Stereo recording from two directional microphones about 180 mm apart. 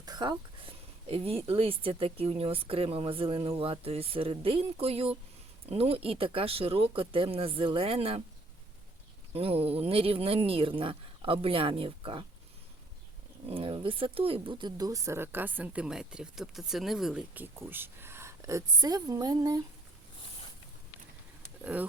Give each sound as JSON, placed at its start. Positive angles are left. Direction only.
{"t": 0.0, "sound": "a sound", "side_deg": -25}
{"t": 1.5, "sound": "speech", "side_deg": -30}
{"t": 9.3, "sound": "speech", "side_deg": -35}
{"t": 13.5, "sound": "speech", "side_deg": -30}
{"t": 21.6, "sound": "speech", "side_deg": -10}